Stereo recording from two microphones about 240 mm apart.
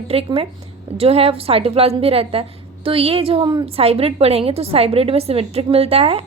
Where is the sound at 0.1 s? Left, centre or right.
Right.